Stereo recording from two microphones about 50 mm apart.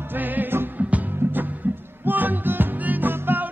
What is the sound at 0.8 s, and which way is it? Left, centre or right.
Music, right.